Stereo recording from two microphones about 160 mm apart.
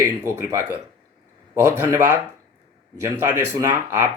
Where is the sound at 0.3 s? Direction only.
20° right (ahead or behind).